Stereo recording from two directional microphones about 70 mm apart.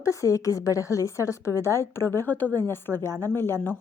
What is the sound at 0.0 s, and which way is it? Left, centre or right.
A woman's voice, left.